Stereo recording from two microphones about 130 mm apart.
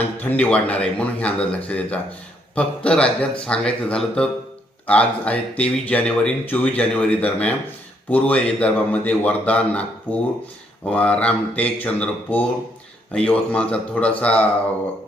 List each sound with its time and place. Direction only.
0.2 s a man's voice: 10° left (ahead or behind)